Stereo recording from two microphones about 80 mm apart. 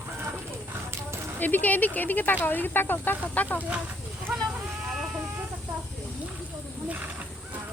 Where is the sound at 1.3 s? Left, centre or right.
Left.